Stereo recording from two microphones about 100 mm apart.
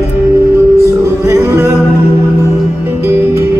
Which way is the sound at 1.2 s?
25° right (ahead or behind).